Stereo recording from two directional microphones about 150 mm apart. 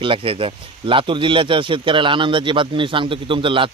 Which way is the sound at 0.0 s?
35° right (ahead or behind).